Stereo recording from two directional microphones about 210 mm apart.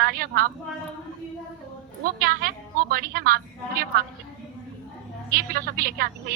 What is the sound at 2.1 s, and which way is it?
A woman's voice, 45° right (ahead or behind).